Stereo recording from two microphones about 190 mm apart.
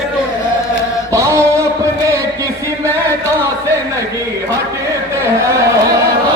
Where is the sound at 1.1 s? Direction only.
15° right (ahead or behind).